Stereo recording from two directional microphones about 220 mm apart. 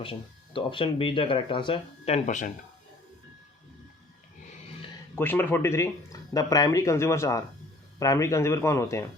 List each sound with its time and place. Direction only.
0.0 s speech: 25° left (ahead or behind)
5.1 s speech: 10° left (ahead or behind)